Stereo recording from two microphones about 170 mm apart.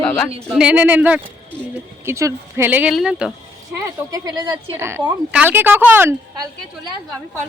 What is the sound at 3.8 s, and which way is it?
A woman's voice, 20° right (ahead or behind).